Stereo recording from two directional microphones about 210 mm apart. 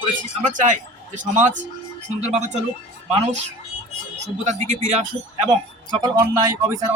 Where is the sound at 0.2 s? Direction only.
35° right (ahead or behind).